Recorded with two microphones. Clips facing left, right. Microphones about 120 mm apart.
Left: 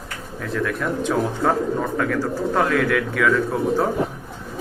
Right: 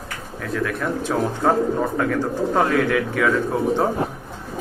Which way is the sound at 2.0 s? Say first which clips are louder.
Right 1 dB; 15° right (ahead or behind).